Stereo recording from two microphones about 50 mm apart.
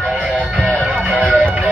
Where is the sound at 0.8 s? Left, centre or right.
Right.